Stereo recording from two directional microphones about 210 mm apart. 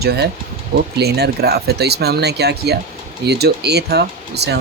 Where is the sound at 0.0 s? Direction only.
50° right (ahead or behind).